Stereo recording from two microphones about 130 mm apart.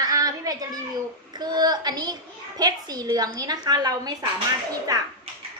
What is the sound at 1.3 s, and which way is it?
A woman's voice, 35° right (ahead or behind).